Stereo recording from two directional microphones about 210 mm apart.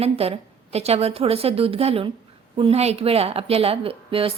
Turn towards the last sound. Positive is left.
turn(degrees=-25)  # may be behind; listen again after turning